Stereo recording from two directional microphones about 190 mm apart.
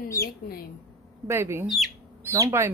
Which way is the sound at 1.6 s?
Centre (ahead or behind).